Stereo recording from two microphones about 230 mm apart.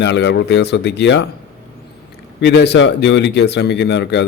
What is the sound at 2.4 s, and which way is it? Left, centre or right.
A man's voice, left.